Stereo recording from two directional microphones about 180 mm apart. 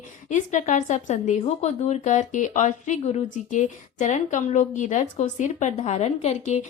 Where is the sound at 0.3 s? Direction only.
40° left (ahead or behind).